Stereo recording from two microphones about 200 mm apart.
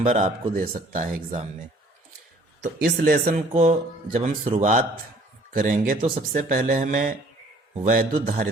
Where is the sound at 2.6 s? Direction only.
55° right (ahead or behind).